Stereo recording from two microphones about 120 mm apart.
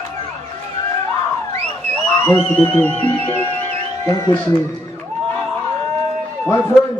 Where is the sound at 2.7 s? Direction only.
15° left (ahead or behind).